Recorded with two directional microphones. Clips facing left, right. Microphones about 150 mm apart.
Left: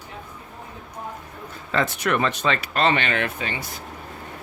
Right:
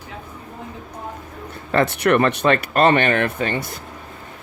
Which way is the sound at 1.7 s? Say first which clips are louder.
Right 6 dB; 60° right (ahead or behind).